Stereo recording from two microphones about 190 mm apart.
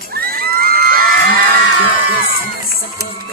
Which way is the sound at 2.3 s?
50° left (ahead or behind).